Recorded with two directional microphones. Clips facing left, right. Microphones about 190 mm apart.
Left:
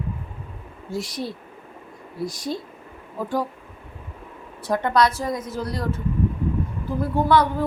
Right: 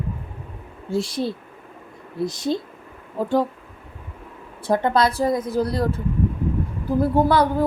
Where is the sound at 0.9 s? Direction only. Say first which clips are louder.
Right 5 dB; 30° right (ahead or behind).